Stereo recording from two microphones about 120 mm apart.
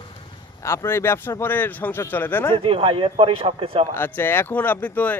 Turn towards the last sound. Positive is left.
turn(degrees=15)  # may be behind; listen again after turning